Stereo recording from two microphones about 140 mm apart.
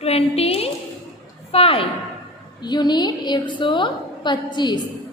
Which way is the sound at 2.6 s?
30° left (ahead or behind).